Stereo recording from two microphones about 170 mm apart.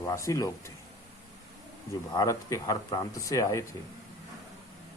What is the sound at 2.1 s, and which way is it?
Speech, 20° left (ahead or behind).